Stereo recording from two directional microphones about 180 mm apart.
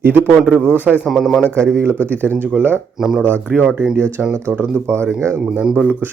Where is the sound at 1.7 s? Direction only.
15° right (ahead or behind).